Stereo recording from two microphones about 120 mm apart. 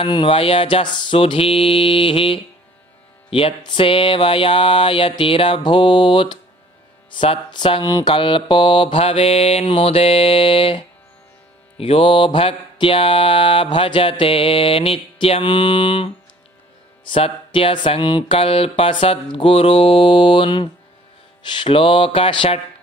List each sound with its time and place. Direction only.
0.0 s mantra: 50° left (ahead or behind)
11.8 s mantra: 50° left (ahead or behind)
17.1 s mantra: 50° left (ahead or behind)